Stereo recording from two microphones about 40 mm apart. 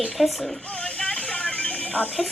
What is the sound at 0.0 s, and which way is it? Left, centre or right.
Speech, centre.